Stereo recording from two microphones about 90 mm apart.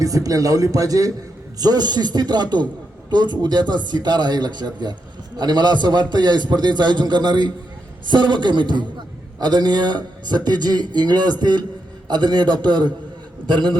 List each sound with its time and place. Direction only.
0.0 s a man's voice: 40° right (ahead or behind); by 13.7 s 60° right (ahead or behind)